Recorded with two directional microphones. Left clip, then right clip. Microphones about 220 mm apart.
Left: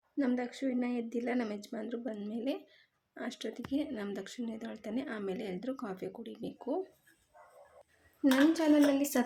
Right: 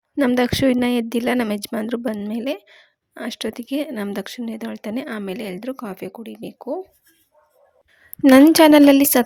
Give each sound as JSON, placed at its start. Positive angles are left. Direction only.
{"t": 0.2, "sound": "speech", "side_deg": -50}
{"t": 8.2, "sound": "speech", "side_deg": -50}